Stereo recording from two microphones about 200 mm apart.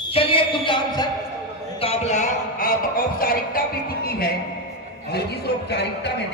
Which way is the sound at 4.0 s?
50° left (ahead or behind).